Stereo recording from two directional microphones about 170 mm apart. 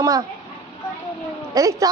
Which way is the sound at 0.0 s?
20° right (ahead or behind).